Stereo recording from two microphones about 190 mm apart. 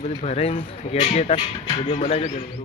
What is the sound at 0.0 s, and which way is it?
Speech, 35° left (ahead or behind).